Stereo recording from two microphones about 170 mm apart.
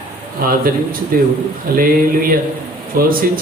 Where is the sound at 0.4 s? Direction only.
60° right (ahead or behind).